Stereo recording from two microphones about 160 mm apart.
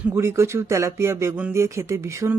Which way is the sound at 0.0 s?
15° right (ahead or behind).